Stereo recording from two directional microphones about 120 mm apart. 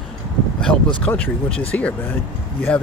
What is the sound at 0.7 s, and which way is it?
Speech, 10° left (ahead or behind).